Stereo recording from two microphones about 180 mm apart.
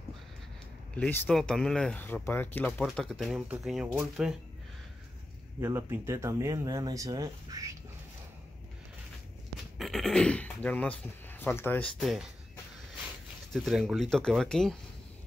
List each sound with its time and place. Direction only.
0.9 s speech: 5° left (ahead or behind)
5.6 s speech: 15° right (ahead or behind)
9.8 s speech: centre (ahead or behind)
12.0 s speech: centre (ahead or behind)
13.5 s speech: centre (ahead or behind)